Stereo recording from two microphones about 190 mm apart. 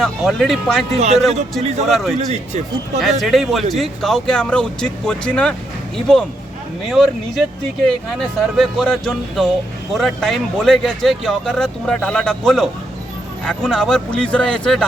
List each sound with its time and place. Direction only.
0.0 s speech: centre (ahead or behind)
0.9 s speech: 35° right (ahead or behind)
1.8 s speech: centre (ahead or behind)
2.1 s speech: 35° right (ahead or behind)
3.0 s speech: centre (ahead or behind)